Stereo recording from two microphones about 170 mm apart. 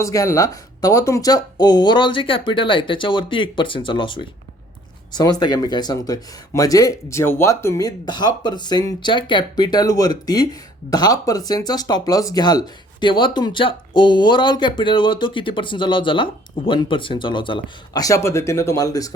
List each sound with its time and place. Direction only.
0.0 s speech: 20° left (ahead or behind)